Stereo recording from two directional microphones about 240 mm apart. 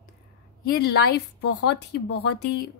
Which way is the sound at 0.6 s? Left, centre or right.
Left.